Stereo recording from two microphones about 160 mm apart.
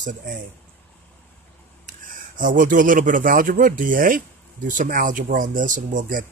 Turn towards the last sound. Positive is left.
turn(degrees=-55)  # may be behind; listen again after turning